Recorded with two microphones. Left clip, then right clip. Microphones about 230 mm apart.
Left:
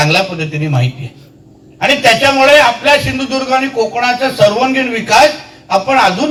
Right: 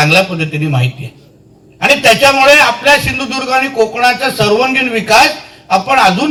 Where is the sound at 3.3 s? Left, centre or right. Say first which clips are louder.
Even; right.